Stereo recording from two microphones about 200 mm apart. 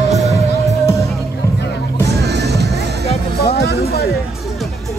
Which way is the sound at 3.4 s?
50° left (ahead or behind).